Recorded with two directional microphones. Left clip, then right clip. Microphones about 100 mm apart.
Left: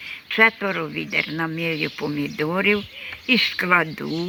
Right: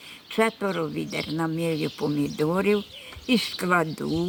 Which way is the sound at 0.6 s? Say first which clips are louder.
Left 2 dB; 15° right (ahead or behind).